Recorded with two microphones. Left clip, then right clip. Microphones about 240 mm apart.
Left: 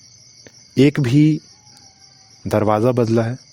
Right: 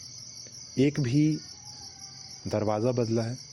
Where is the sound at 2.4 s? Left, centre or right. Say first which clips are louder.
Left 11 dB; left.